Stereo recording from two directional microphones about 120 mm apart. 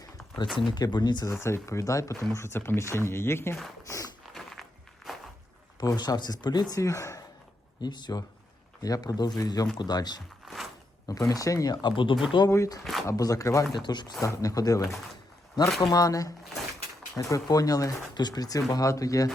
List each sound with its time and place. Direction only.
0.5 s speech: 40° left (ahead or behind)
1.4 s speech: 20° left (ahead or behind)
3.8 s a sound: 25° left (ahead or behind)
5.8 s speech: 30° left (ahead or behind)
7.8 s speech: 35° left (ahead or behind)
10.4 s a sound: centre (ahead or behind)
11.1 s speech: 30° left (ahead or behind)
12.5 s speech: 25° left (ahead or behind)
12.8 s speech: centre (ahead or behind)
13.1 s speech: 30° left (ahead or behind)
13.7 s speech: 40° left (ahead or behind)
14.2 s speech: 25° left (ahead or behind)